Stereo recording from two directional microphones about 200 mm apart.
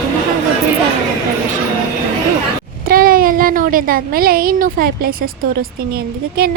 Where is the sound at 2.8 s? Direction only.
45° right (ahead or behind).